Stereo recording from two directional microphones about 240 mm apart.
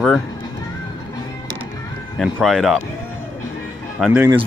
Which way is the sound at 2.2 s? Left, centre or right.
Centre.